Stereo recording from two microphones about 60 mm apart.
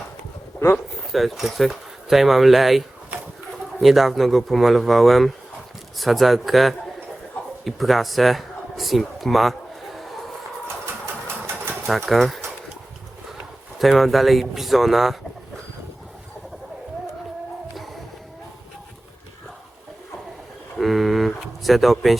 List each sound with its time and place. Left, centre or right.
1.1 s speech: centre
11.0 s sewing machine: right
12.0 s speech: centre
13.7 s speech: centre
20.7 s vehicle: centre
21.6 s speech: centre